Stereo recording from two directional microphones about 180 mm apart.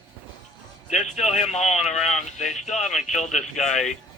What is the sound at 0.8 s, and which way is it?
A man's voice, 40° left (ahead or behind).